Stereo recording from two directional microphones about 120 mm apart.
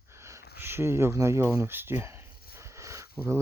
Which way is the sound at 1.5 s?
20° right (ahead or behind).